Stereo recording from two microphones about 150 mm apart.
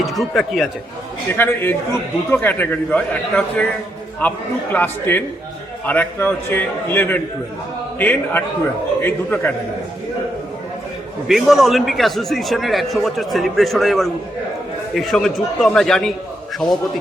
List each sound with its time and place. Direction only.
0.0 s speech: centre (ahead or behind)
1.3 s a man's voice: 15° left (ahead or behind)
11.3 s a man's voice: centre (ahead or behind)